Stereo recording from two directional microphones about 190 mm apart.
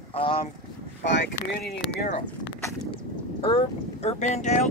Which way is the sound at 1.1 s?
60° left (ahead or behind).